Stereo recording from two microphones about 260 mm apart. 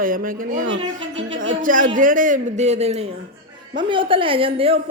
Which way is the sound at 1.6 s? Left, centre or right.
Right.